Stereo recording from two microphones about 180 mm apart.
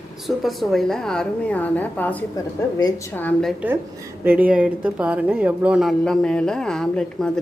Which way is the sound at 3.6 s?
15° right (ahead or behind).